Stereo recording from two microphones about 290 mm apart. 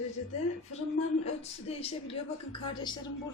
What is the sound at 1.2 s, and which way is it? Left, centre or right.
Speech, left.